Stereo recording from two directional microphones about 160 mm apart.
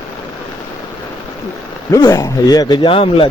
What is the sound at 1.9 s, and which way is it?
Speech, 20° left (ahead or behind).